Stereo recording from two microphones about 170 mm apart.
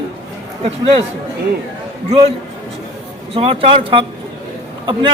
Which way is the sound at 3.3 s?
35° right (ahead or behind).